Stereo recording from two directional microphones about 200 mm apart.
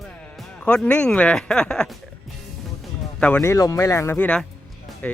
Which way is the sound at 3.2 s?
5° left (ahead or behind).